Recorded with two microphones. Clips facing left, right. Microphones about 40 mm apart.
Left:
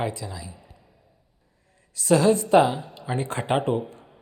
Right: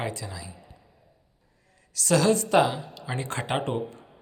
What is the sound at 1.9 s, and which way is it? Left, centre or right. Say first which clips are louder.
Speech: left 3 dB; centre.